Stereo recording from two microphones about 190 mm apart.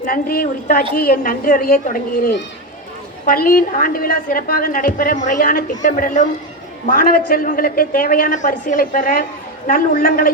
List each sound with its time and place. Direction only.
0.0 s a woman's voice: 50° left (ahead or behind)